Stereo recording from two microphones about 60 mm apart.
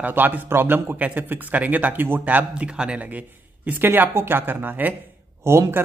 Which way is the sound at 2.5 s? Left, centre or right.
Centre.